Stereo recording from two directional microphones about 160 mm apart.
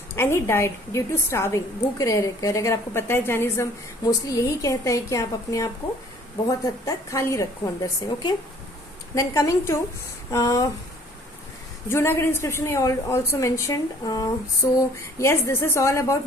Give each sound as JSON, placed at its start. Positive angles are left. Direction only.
{"t": 0.2, "sound": "a woman's voice", "side_deg": 15}
{"t": 11.9, "sound": "a woman's voice", "side_deg": 15}